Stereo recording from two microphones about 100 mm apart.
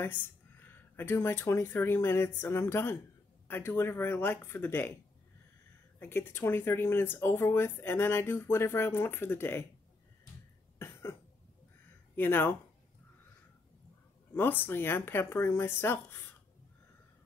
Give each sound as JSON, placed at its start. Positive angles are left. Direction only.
{"t": 0.0, "sound": "speech", "side_deg": 20}
{"t": 5.9, "sound": "speech", "side_deg": 20}
{"t": 10.8, "sound": "cough", "side_deg": 25}
{"t": 12.2, "sound": "speech", "side_deg": 20}
{"t": 14.3, "sound": "speech", "side_deg": 20}